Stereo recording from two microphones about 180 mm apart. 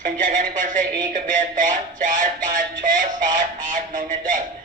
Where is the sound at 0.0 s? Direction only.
50° right (ahead or behind).